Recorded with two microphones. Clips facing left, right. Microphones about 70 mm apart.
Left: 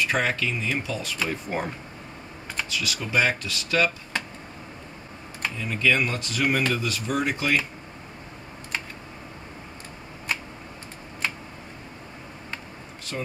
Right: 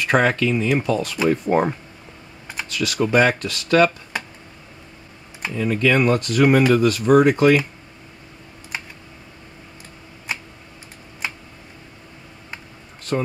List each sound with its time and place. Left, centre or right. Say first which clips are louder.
0.0 s speech: right 7 dB; right
2.7 s speech: right 9 dB; right
5.6 s speech: right 6 dB; right
13.1 s speech: right 10 dB; right